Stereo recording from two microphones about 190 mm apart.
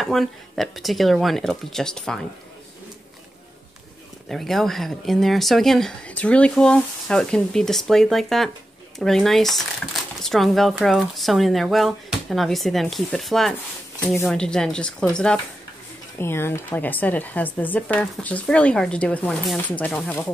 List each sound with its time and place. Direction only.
0.0 s speech: centre (ahead or behind)
4.3 s a woman's voice: centre (ahead or behind)